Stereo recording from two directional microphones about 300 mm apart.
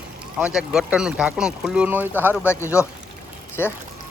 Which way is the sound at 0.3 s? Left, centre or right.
Centre.